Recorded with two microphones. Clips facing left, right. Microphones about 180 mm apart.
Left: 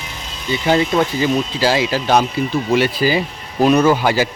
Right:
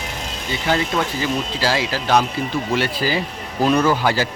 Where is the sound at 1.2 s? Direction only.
20° left (ahead or behind).